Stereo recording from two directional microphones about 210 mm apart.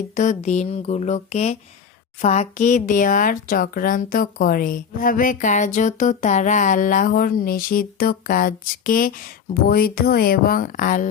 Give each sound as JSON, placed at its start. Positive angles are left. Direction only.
{"t": 0.2, "sound": "speech", "side_deg": 35}